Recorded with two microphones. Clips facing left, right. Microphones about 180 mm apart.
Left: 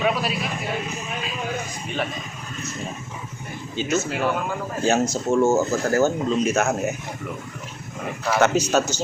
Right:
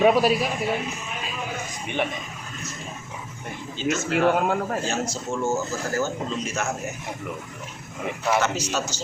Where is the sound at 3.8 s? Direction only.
65° right (ahead or behind).